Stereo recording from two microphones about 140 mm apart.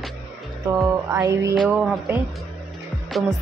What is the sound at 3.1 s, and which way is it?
Speech, centre (ahead or behind).